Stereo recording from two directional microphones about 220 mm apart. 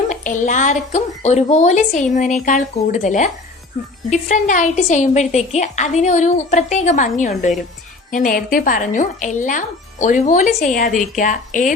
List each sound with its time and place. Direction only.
0.1 s speech: 35° left (ahead or behind)